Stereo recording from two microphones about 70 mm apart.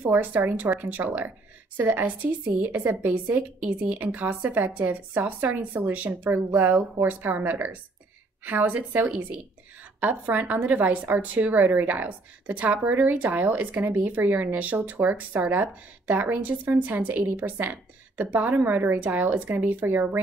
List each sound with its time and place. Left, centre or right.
0.0 s a woman's voice: right